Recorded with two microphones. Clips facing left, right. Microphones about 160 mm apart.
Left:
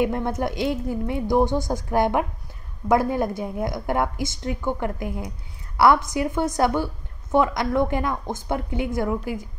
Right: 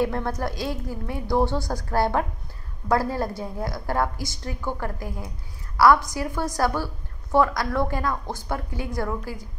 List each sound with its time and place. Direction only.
0.0 s a woman's voice: 20° left (ahead or behind)